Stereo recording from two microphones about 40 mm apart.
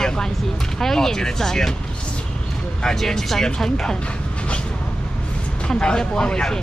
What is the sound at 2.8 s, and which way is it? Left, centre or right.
Speech, centre.